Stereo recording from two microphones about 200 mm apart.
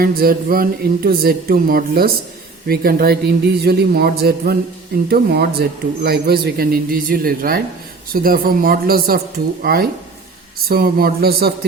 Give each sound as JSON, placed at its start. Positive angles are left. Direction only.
{"t": 0.0, "sound": "a man's voice", "side_deg": -45}